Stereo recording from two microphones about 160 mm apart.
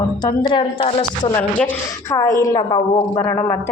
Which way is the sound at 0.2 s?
25° left (ahead or behind).